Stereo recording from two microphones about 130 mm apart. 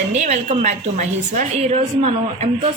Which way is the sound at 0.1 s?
60° right (ahead or behind).